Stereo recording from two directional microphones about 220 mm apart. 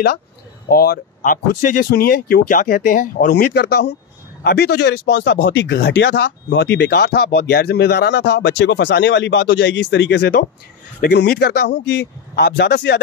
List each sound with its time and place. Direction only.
0.7 s speech: 40° left (ahead or behind)